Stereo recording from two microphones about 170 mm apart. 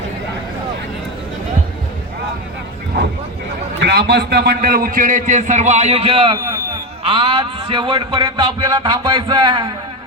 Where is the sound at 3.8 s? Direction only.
85° right.